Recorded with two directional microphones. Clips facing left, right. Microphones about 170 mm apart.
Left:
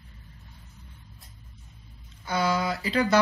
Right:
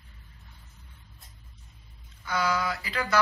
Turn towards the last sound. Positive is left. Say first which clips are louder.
# left 5 dB
turn(degrees=30)  # may be behind; listen again after turning